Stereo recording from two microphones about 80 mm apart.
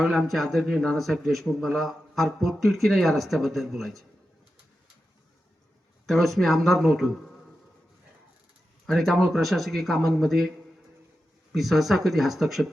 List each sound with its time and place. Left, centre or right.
0.0 s a man's voice: centre
6.1 s a man's voice: centre
8.9 s a man's voice: centre
11.5 s a man's voice: centre